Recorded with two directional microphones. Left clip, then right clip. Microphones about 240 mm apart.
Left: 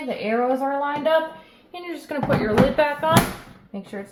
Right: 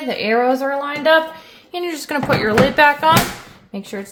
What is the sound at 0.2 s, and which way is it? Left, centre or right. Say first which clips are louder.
A woman's voice: right 6 dB; right.